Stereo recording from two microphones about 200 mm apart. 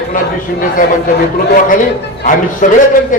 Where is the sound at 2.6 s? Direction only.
40° left (ahead or behind).